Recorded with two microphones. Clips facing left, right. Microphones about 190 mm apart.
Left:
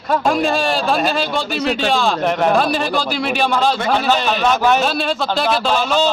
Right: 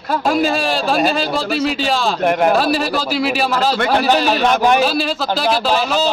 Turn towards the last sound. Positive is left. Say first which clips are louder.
# even
turn(degrees=-5)  # may be behind; listen again after turning